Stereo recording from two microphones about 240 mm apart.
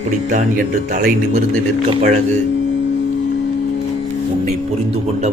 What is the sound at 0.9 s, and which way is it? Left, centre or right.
Speech, right.